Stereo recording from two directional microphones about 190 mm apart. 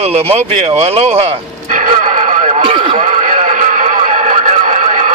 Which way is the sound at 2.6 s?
25° right (ahead or behind).